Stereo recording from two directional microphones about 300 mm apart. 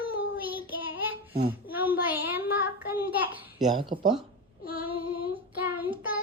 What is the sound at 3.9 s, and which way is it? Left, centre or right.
Speech, right.